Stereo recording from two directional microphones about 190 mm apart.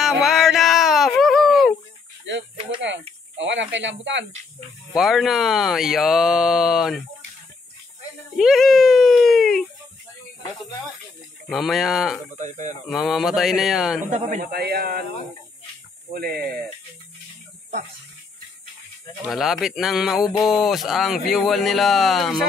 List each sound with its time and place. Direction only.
0.0 s a sound: centre (ahead or behind)
3.3 s speech: 75° right (ahead or behind)
4.9 s speech: centre (ahead or behind)
8.4 s speech: centre (ahead or behind)
11.4 s speech: centre (ahead or behind)
12.4 s speech: 40° right (ahead or behind)
12.8 s speech: centre (ahead or behind)
14.1 s a man's voice: 45° right (ahead or behind)
16.1 s a man's voice: 55° right (ahead or behind)
19.2 s speech: centre (ahead or behind)